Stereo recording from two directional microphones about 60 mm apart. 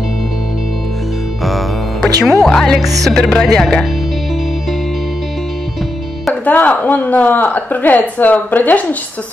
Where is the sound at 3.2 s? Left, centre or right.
Centre.